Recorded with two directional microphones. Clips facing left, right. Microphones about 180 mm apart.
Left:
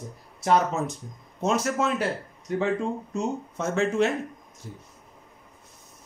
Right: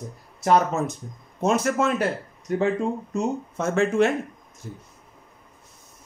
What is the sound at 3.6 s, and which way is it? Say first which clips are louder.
Speech: right 3 dB; 55° right (ahead or behind).